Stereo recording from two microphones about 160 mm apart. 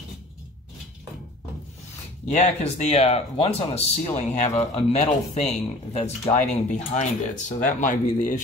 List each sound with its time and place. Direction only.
2.2 s speech: 45° left (ahead or behind)